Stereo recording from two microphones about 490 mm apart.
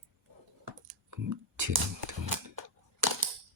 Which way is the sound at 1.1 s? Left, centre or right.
Right.